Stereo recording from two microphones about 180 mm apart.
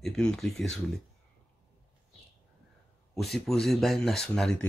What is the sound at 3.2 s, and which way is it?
Speech, centre (ahead or behind).